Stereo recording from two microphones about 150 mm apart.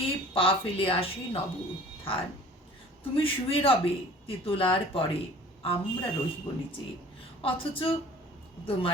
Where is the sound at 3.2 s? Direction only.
40° left (ahead or behind).